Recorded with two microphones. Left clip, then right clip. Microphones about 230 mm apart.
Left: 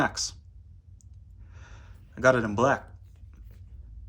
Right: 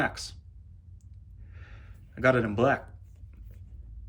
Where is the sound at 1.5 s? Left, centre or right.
Centre.